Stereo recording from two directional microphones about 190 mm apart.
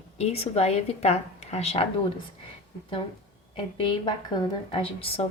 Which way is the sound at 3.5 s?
25° left (ahead or behind).